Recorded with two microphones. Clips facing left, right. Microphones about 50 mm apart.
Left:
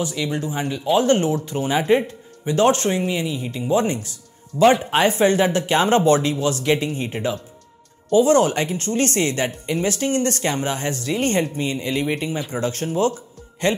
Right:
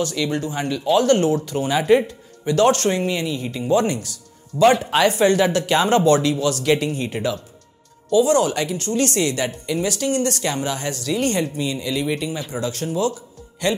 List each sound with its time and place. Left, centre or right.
0.0 s speech: centre
8.1 s speech: left